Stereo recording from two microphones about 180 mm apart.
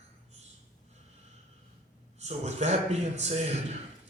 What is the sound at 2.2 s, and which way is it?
A man's voice, 40° right (ahead or behind).